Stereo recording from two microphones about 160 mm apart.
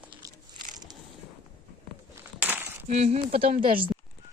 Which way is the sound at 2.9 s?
45° right (ahead or behind).